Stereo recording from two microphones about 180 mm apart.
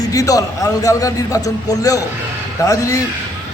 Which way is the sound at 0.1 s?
20° left (ahead or behind).